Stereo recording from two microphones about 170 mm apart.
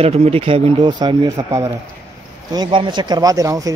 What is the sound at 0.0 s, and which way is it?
A man's voice, 35° right (ahead or behind).